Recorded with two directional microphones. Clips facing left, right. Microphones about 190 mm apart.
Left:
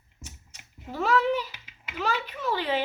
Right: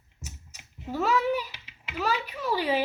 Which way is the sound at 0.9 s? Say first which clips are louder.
Left 1 dB; 5° right (ahead or behind).